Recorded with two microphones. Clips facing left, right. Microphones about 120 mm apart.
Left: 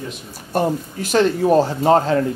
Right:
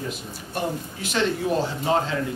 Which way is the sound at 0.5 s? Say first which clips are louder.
Left 8 dB; 45° left (ahead or behind).